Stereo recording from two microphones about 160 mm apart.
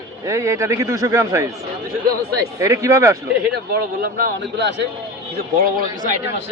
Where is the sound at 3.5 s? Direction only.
75° right (ahead or behind); by 4.9 s 90° right.